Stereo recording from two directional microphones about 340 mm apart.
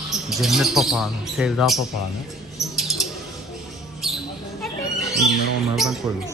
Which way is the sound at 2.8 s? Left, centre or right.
Centre.